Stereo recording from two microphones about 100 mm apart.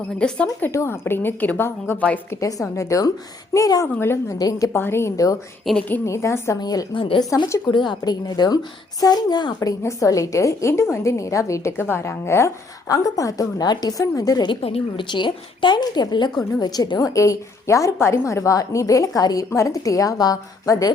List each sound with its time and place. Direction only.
0.2 s a woman's voice: 10° left (ahead or behind)
0.6 s a woman's voice: 25° left (ahead or behind)
2.3 s a woman's voice: 35° left (ahead or behind)
3.9 s a woman's voice: 25° left (ahead or behind)
4.4 s a woman's voice: 35° left (ahead or behind)
5.7 s a woman's voice: centre (ahead or behind)
6.1 s a woman's voice: 30° left (ahead or behind)
6.6 s a woman's voice: 40° left (ahead or behind)
6.9 s a woman's voice: 60° left (ahead or behind)
7.2 s a woman's voice: 45° left (ahead or behind)
9.6 s a woman's voice: 30° left (ahead or behind)
14.6 s a woman's voice: 75° left (ahead or behind)
15.0 s a woman's voice: 50° left (ahead or behind); by 20.9 s 35° left (ahead or behind)